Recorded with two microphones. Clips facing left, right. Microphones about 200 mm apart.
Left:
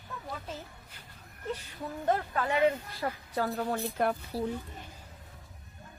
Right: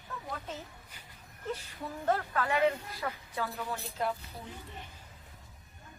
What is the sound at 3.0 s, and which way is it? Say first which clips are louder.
A woman's voice: left 4 dB; 40° left (ahead or behind).